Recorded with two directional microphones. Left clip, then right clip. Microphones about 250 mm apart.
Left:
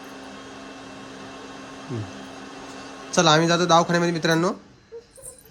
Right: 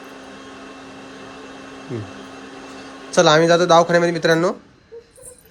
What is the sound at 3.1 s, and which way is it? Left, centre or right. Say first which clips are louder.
Speech: right 5 dB; centre.